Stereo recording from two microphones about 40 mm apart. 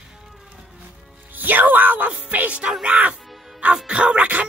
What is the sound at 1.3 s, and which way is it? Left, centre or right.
Music, right.